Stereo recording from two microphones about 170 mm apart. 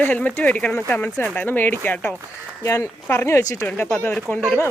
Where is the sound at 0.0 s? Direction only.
10° left (ahead or behind).